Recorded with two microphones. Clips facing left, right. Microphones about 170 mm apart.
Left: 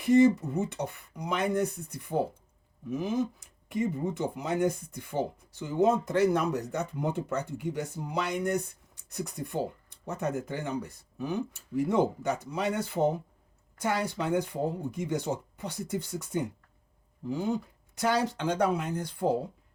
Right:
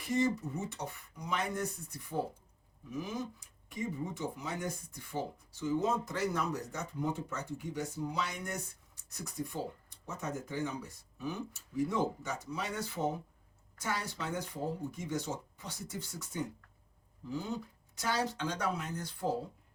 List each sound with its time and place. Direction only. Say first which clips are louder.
0.1 s speech: left 10 dB; 65° left (ahead or behind)
3.7 s speech: left 8 dB; 65° left (ahead or behind)